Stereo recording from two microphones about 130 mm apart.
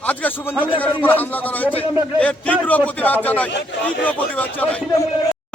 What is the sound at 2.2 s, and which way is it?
A man's voice, 10° left (ahead or behind).